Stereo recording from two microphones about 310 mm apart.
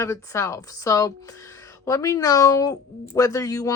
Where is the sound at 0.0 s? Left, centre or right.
Centre.